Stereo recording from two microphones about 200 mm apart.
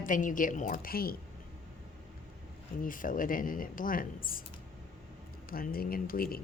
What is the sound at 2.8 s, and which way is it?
Speech, 45° left (ahead or behind).